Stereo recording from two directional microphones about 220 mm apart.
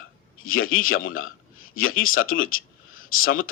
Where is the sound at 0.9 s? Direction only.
40° left (ahead or behind).